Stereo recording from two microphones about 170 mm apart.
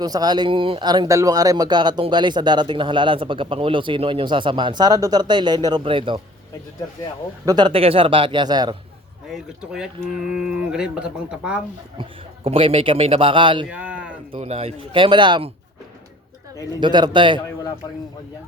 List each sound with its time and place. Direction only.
0.0 s speech: 25° right (ahead or behind)
7.4 s speech: 25° right (ahead or behind)
9.3 s speech: 5° right (ahead or behind)
12.5 s a man's voice: 35° right (ahead or behind)
13.7 s a sound: 10° right (ahead or behind)
14.3 s a man's voice: 35° right (ahead or behind)
16.8 s speech: 25° right (ahead or behind)